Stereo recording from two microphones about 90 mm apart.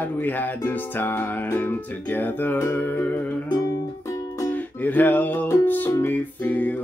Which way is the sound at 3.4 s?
50° left (ahead or behind).